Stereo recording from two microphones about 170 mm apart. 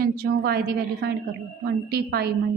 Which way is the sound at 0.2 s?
65° right (ahead or behind).